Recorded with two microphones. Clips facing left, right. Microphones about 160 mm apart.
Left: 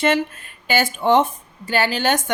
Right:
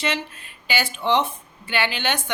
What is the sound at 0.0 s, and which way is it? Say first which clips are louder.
A woman's voice: left 8 dB; 50° left (ahead or behind).